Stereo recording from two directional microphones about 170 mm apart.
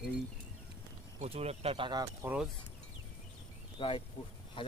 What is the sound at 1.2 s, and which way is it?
Speech, 35° right (ahead or behind).